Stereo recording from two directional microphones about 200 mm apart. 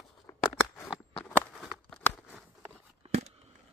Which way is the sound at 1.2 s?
5° left (ahead or behind).